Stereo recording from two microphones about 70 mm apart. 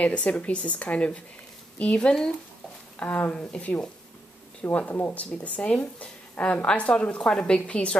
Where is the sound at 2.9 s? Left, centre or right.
Left.